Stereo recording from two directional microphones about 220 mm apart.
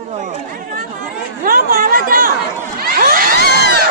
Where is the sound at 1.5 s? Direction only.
40° right (ahead or behind).